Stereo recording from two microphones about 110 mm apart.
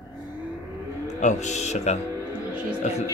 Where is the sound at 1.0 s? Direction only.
90° left.